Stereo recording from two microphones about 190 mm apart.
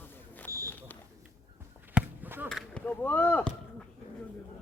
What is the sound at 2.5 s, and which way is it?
Chop, 5° left (ahead or behind).